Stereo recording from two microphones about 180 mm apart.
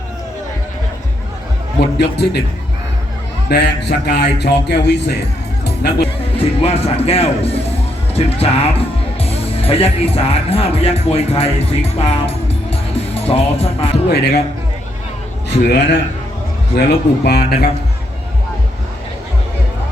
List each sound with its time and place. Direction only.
1.8 s a man's voice: 65° left (ahead or behind)
3.5 s a man's voice: 70° left (ahead or behind)
5.6 s music: 65° left (ahead or behind)
6.3 s speech: 35° left (ahead or behind)
14.1 s speech: 65° left (ahead or behind)
15.7 s a man's voice: 70° left (ahead or behind)